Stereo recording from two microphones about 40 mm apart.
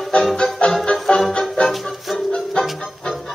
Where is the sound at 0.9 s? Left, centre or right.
Centre.